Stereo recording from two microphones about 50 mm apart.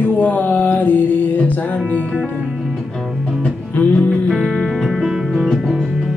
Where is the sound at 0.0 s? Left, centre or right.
Left.